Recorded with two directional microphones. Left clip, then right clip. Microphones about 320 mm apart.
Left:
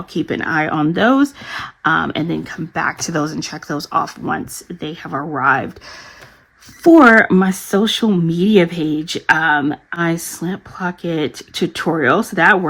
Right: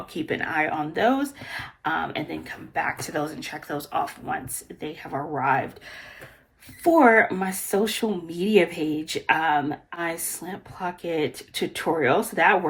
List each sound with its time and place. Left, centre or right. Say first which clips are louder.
0.1 s speech: left 8 dB; centre
6.9 s speech: left 8 dB; centre